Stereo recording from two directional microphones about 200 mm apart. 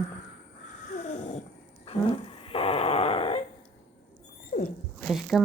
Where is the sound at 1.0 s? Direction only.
35° left (ahead or behind).